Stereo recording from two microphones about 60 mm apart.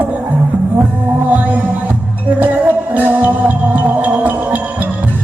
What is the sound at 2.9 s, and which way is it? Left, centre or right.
Music, right.